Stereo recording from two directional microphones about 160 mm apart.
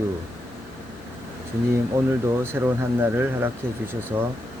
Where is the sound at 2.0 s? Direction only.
15° right (ahead or behind).